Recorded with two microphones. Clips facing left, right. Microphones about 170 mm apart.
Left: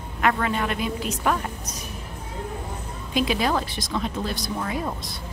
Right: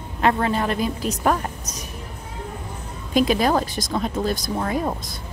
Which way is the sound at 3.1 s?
45° right (ahead or behind).